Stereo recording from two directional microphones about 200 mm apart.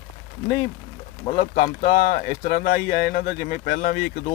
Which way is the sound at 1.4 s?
45° left (ahead or behind).